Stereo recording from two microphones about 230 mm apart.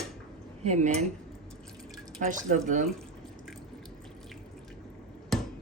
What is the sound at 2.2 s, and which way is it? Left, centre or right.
Speech, right.